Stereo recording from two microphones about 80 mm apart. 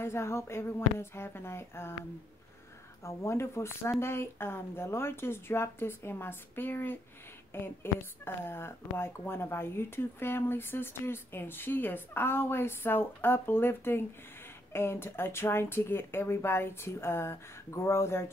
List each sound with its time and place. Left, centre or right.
0.0 s speech: left
3.0 s speech: left